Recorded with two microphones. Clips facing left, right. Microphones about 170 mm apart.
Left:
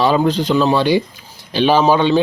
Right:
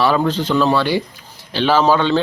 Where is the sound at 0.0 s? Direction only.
15° left (ahead or behind).